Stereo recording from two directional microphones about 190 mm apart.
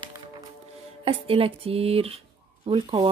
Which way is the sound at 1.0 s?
30° right (ahead or behind).